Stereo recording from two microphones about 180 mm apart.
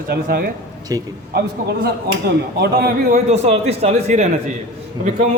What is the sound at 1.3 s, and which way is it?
A man's voice, 60° right (ahead or behind).